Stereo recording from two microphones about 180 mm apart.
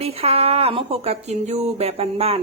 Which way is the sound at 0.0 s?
35° right (ahead or behind).